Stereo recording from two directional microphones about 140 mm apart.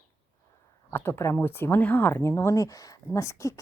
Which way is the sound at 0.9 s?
15° left (ahead or behind).